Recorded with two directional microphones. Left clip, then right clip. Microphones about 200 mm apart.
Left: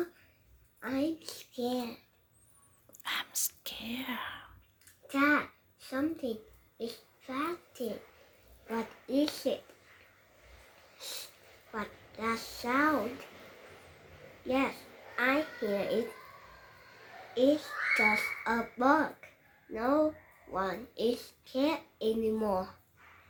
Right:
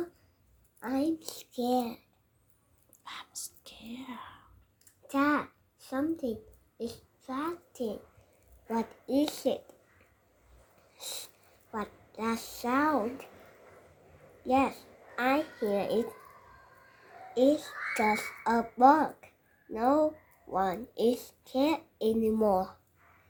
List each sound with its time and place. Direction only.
0.8 s a sound: 55° right (ahead or behind)
3.0 s whispering: 10° left (ahead or behind)
5.0 s a child's voice: 55° right (ahead or behind)
10.9 s a sound: 60° right (ahead or behind)
11.7 s a child's voice: 55° right (ahead or behind)
14.4 s a child's voice: 55° right (ahead or behind)
17.3 s a child's voice: 60° right (ahead or behind)